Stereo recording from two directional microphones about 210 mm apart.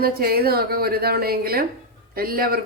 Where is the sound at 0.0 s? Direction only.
45° right (ahead or behind).